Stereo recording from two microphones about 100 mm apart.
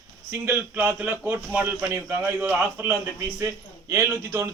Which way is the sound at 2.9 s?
30° right (ahead or behind).